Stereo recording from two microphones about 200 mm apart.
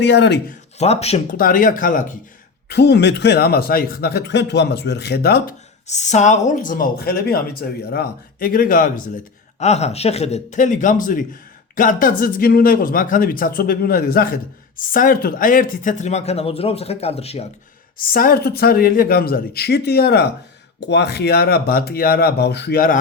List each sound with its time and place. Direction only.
0.0 s a man's voice: 60° left (ahead or behind)
0.8 s speech: 30° left (ahead or behind)
1.3 s speech: 45° left (ahead or behind)
2.6 s a man's voice: 55° left (ahead or behind)
5.9 s speech: 35° left (ahead or behind)
9.6 s speech: 35° left (ahead or behind)
18.1 s speech: 45° left (ahead or behind)